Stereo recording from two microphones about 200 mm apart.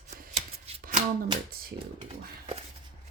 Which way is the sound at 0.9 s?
35° right (ahead or behind).